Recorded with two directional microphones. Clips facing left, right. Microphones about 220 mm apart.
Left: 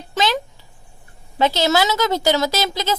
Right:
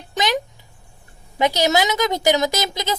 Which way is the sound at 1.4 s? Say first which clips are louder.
Left 1 dB; 15° right (ahead or behind).